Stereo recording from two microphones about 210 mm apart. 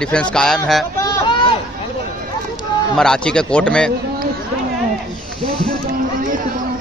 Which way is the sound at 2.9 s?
5° left (ahead or behind).